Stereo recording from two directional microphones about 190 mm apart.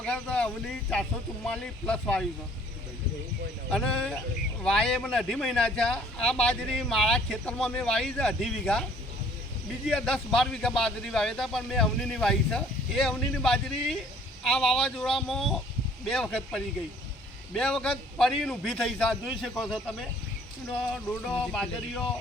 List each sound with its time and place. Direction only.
0.0 s speech: 5° left (ahead or behind)
3.7 s speech: 5° left (ahead or behind)
21.5 s speech: centre (ahead or behind)